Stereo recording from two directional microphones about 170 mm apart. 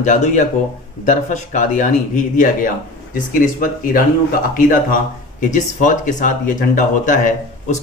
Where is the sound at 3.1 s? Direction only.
55° left (ahead or behind).